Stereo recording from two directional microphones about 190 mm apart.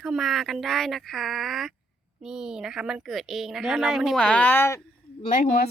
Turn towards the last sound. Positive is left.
turn(degrees=40)  # may be behind; listen again after turning